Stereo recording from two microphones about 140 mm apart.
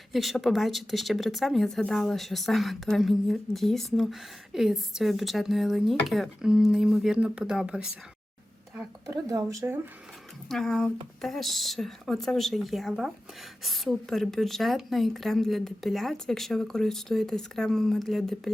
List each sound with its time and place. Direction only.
0.1 s speech: centre (ahead or behind)
9.0 s speech: 25° right (ahead or behind)
10.5 s speech: 5° left (ahead or behind)